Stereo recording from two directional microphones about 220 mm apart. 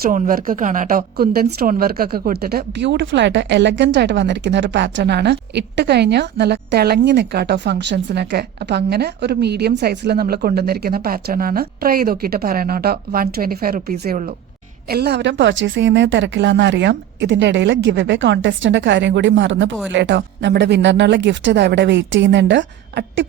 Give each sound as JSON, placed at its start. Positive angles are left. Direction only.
{"t": 0.0, "sound": "a woman's voice", "side_deg": -40}